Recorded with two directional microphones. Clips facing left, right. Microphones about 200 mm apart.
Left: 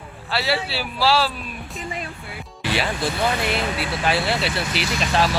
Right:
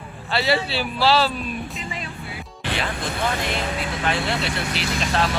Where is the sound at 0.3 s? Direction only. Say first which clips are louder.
Right 2 dB; 5° left (ahead or behind).